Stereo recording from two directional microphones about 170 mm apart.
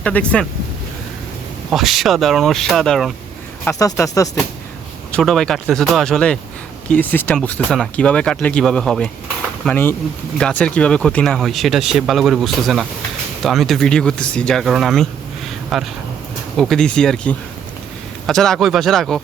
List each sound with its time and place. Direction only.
0.0 s speech: 5° left (ahead or behind)
1.7 s speech: centre (ahead or behind)
3.6 s speech: 15° left (ahead or behind)
5.1 s speech: centre (ahead or behind)